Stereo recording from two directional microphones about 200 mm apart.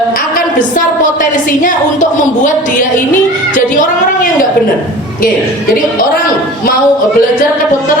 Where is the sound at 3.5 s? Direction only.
40° left (ahead or behind).